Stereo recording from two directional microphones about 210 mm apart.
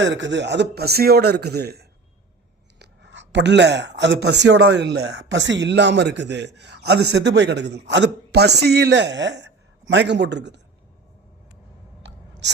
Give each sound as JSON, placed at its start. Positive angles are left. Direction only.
{"t": 0.0, "sound": "a man's voice", "side_deg": -60}
{"t": 12.0, "sound": "clicking", "side_deg": -55}